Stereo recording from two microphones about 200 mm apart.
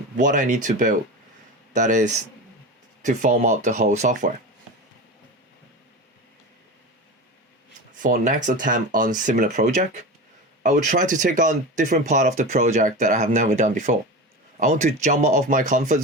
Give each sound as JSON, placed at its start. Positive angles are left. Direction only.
{"t": 0.2, "sound": "speech", "side_deg": -40}
{"t": 8.0, "sound": "speech", "side_deg": -40}